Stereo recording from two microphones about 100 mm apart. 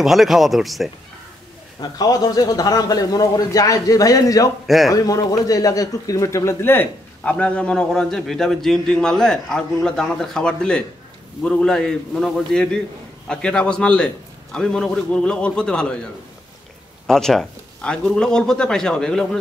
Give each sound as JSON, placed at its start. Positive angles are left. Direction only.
{"t": 0.0, "sound": "speech", "side_deg": 0}
{"t": 1.8, "sound": "speech", "side_deg": 40}
{"t": 4.6, "sound": "speech", "side_deg": 0}
{"t": 4.9, "sound": "speech", "side_deg": 35}
{"t": 17.1, "sound": "speech", "side_deg": 5}